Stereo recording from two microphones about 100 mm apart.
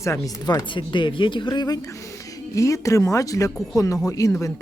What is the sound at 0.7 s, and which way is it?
Speech, 55° left (ahead or behind).